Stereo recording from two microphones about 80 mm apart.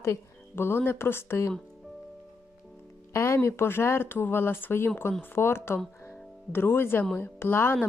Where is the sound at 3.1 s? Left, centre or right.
Left.